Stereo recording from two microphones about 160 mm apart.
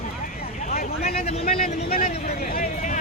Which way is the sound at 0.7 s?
70° left (ahead or behind).